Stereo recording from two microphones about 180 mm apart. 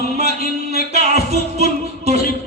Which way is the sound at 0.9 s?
40° right (ahead or behind).